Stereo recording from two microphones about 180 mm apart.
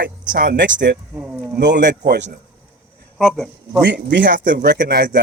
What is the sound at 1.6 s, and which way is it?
Speech, 75° right (ahead or behind).